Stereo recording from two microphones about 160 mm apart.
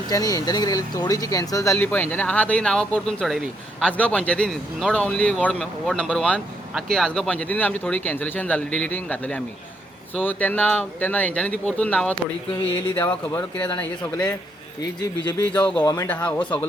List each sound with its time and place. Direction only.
0.1 s speech: 25° left (ahead or behind)
16.0 s speech: 10° left (ahead or behind)